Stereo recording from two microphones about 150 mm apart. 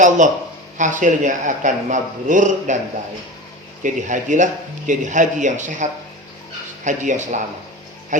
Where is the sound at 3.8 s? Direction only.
55° right (ahead or behind).